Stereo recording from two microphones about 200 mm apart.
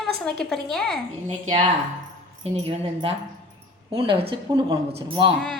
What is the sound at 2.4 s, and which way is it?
Speech, 30° right (ahead or behind).